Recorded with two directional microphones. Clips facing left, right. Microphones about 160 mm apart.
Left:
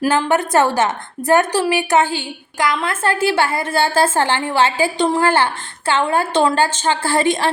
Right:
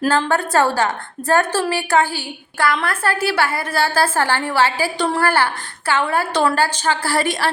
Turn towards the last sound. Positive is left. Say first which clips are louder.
# left 3 dB
turn(degrees=20)  # may be behind; listen again after turning